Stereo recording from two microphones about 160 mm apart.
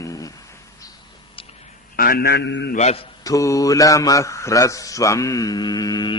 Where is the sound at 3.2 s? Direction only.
20° left (ahead or behind).